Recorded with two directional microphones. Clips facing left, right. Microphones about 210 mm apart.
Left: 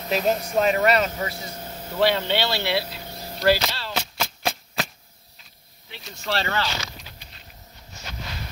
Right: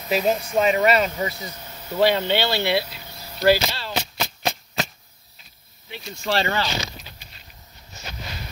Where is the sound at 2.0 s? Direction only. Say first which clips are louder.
Right 2 dB; 10° right (ahead or behind).